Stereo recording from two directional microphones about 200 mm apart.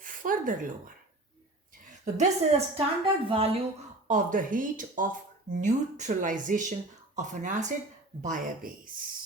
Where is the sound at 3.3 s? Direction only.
30° right (ahead or behind).